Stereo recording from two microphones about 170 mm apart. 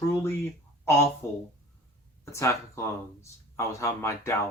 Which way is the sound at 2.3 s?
15° left (ahead or behind).